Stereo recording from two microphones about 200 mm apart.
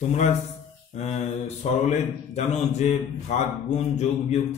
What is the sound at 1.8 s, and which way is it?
A man's voice, 35° left (ahead or behind).